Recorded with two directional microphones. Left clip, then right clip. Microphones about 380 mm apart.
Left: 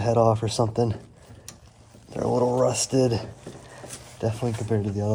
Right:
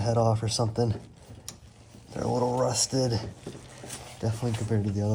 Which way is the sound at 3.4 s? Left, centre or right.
Centre.